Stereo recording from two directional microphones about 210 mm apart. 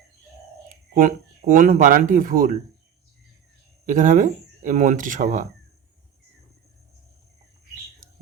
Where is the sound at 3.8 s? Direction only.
40° right (ahead or behind).